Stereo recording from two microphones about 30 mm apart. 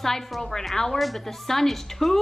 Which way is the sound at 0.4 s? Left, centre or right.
Centre.